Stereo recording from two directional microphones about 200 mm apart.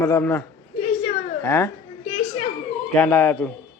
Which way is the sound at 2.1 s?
30° left (ahead or behind).